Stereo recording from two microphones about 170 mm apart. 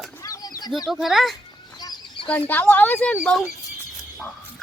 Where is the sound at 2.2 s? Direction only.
30° left (ahead or behind).